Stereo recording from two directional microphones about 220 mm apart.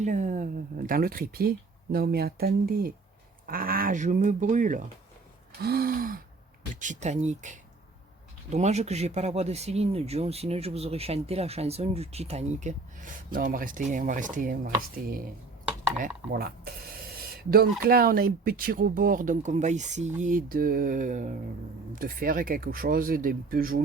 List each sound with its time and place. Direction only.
0.0 s speech: 35° right (ahead or behind)
17.5 s speech: 45° right (ahead or behind)